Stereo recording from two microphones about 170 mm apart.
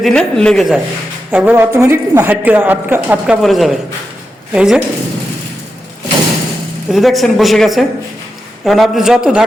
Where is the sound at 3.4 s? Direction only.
Centre (ahead or behind).